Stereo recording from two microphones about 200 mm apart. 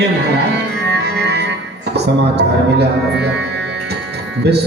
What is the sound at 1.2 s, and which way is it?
Music, 55° right (ahead or behind).